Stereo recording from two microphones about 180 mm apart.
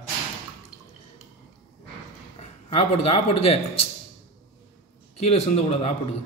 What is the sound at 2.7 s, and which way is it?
Speech, 35° left (ahead or behind).